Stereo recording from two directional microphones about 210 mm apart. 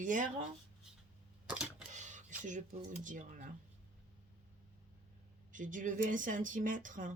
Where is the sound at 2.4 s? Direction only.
35° right (ahead or behind).